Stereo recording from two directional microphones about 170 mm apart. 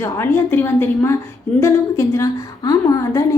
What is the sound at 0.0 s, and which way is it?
A woman's voice, 15° left (ahead or behind).